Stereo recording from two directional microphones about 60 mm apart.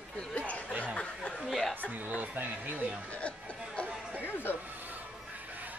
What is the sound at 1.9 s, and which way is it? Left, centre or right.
Speech, right.